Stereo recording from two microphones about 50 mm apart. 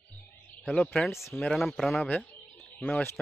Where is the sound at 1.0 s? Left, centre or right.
Centre.